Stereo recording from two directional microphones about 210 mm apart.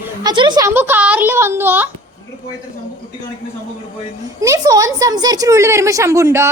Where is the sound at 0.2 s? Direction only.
20° right (ahead or behind).